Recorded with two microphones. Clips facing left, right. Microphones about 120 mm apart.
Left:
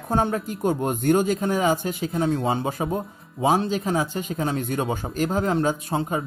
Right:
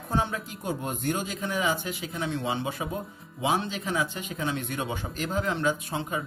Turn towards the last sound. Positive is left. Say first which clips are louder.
# left 6 dB
turn(degrees=40)  # may be behind; listen again after turning